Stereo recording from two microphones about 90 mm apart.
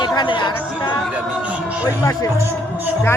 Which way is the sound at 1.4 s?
15° right (ahead or behind).